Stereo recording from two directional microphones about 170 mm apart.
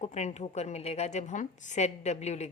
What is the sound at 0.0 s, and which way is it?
A woman's voice, 40° left (ahead or behind).